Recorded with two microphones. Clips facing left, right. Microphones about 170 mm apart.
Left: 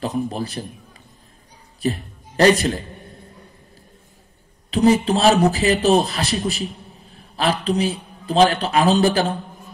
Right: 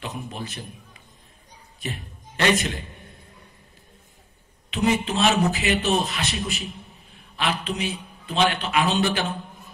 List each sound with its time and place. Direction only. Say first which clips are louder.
0.0 s a man's voice: left 10 dB; 35° left (ahead or behind)
1.8 s a man's voice: left 11 dB; 35° left (ahead or behind)
4.6 s a man's voice: left 7 dB; 35° left (ahead or behind)